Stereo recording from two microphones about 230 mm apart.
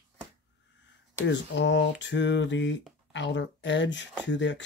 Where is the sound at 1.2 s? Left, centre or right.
Left.